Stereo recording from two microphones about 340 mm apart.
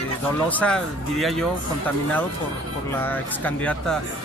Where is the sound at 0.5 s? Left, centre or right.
Centre.